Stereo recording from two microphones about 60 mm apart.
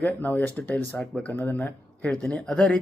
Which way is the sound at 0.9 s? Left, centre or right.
Centre.